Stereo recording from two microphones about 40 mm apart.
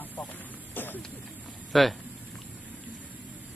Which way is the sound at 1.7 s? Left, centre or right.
Centre.